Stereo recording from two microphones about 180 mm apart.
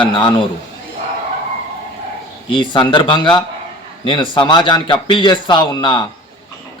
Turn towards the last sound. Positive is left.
turn(degrees=25)  # may be behind; listen again after turning